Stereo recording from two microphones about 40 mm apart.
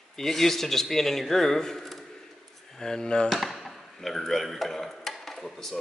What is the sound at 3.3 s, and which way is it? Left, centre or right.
Chop, centre.